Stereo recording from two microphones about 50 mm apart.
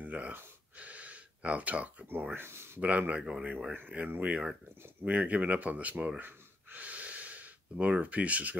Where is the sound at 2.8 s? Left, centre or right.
Right.